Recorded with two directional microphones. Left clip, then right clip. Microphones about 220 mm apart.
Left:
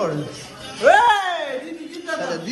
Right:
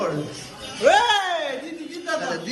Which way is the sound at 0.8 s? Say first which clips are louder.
Left 3 dB; 15° left (ahead or behind).